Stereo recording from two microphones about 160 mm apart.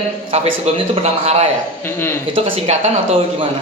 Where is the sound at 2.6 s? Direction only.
40° right (ahead or behind).